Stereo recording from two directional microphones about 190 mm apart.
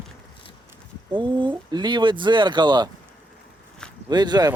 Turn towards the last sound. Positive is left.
turn(degrees=-20)  # may be behind; listen again after turning